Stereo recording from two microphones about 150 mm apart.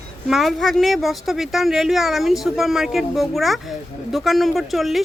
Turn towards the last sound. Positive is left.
turn(degrees=0)  # may be behind; listen again after turning